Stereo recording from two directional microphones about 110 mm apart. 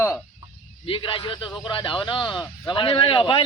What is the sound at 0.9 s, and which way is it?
A man's voice, 50° left (ahead or behind).